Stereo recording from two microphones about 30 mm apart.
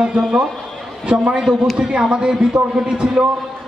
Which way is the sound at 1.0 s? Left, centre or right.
Right.